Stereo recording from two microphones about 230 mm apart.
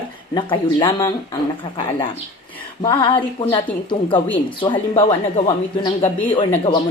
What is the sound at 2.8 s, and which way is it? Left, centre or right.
Speech, centre.